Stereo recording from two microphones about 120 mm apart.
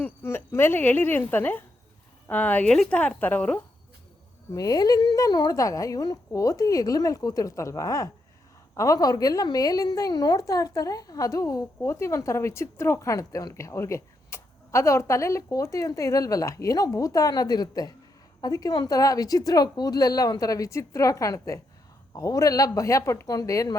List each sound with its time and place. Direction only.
0.0 s speech: 20° left (ahead or behind)
4.5 s a woman's voice: 30° left (ahead or behind)